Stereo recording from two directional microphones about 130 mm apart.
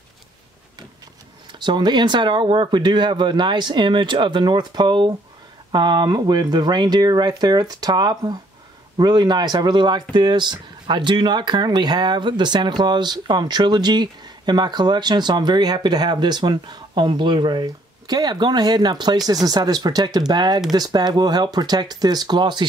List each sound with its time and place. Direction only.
1.5 s speech: 35° right (ahead or behind)